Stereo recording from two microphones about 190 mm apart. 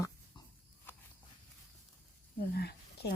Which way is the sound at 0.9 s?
10° left (ahead or behind).